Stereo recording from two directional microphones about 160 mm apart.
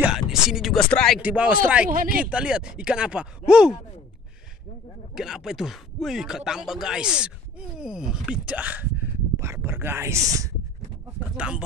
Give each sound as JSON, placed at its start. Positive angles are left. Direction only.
{"t": 0.0, "sound": "speech", "side_deg": -5}
{"t": 1.2, "sound": "speech", "side_deg": -10}
{"t": 5.1, "sound": "speech", "side_deg": -5}
{"t": 11.3, "sound": "speech", "side_deg": -5}